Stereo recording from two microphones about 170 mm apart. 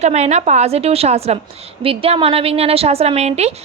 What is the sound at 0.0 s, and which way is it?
A woman's voice, 40° right (ahead or behind).